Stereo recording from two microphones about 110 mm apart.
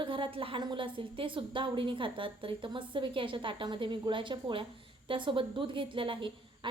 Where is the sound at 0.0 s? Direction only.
50° right (ahead or behind).